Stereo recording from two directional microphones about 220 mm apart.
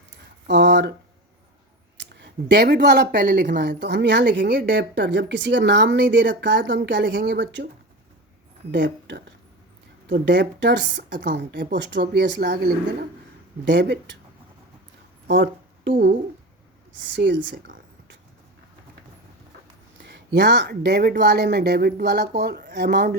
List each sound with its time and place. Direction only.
0.5 s a sound: 55° right (ahead or behind)
2.0 s speech: 50° right (ahead or behind)
8.7 s speech: 55° right (ahead or behind)
15.3 s speech: 55° right (ahead or behind)
17.2 s speech: 50° right (ahead or behind)
20.0 s speech: 50° right (ahead or behind)